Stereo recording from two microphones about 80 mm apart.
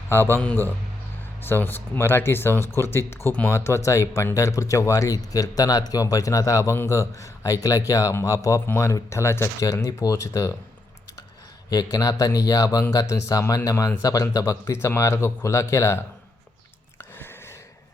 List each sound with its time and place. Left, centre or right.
0.1 s speech: left
11.7 s speech: left
17.0 s a sound: left